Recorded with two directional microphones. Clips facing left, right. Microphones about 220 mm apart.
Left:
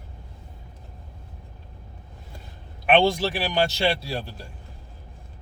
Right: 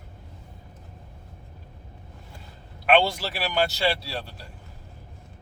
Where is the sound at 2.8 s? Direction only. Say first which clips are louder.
Left 2 dB; 20° left (ahead or behind).